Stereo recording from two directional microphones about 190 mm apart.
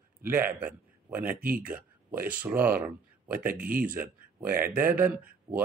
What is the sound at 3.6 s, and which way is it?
Speech, 50° right (ahead or behind).